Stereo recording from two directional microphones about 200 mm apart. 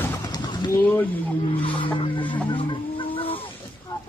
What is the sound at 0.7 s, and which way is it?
Speech, 10° left (ahead or behind).